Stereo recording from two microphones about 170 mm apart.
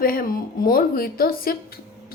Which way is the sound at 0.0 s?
60° left (ahead or behind).